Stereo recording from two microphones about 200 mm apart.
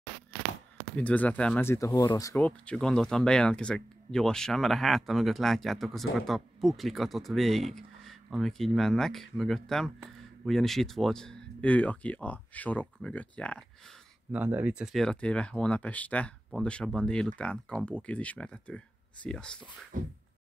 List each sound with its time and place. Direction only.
0.9 s speech: 5° left (ahead or behind)
14.3 s speech: 10° right (ahead or behind)
19.9 s a sound: 40° right (ahead or behind)